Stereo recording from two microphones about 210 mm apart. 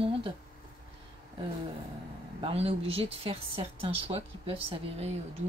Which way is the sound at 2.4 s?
30° right (ahead or behind).